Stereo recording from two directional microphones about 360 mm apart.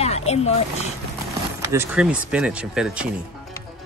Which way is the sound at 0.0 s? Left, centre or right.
Centre.